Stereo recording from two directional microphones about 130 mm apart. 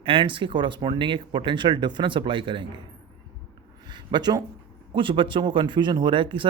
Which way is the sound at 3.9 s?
35° right (ahead or behind).